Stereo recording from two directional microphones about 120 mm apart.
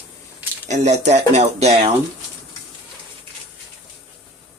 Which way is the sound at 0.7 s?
70° right (ahead or behind).